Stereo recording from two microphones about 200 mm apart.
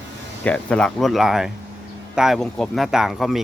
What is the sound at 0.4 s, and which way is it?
Speech, 5° left (ahead or behind).